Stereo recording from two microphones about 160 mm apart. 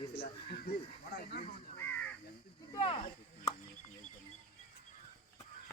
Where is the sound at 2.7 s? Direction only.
30° left (ahead or behind).